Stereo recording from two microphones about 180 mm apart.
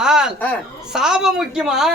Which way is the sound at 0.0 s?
5° right (ahead or behind).